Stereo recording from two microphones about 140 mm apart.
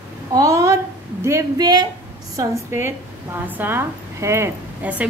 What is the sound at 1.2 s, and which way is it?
Speech, 25° right (ahead or behind).